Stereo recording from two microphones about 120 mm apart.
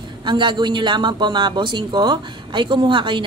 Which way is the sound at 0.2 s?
40° right (ahead or behind).